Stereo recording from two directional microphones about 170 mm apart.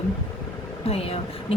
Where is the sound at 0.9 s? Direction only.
35° left (ahead or behind).